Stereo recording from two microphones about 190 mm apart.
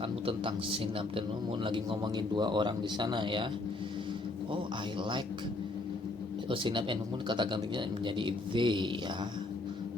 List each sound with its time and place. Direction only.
1.6 s speech: 25° right (ahead or behind)
6.5 s speech: 25° right (ahead or behind)